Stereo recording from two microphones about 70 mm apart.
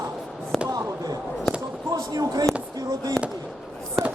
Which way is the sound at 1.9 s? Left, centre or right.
Right.